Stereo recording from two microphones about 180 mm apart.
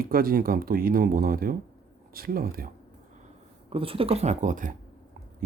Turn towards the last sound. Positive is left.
turn(degrees=-45)  # may be behind; listen again after turning